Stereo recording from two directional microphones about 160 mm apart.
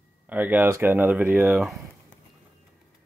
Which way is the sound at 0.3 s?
10° right (ahead or behind).